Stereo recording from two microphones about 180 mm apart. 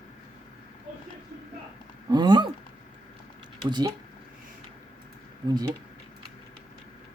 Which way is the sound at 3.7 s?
25° right (ahead or behind).